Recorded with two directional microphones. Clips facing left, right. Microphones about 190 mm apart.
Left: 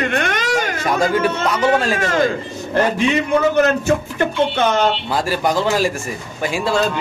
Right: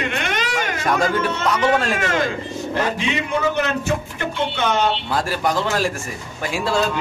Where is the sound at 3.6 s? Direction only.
45° left (ahead or behind).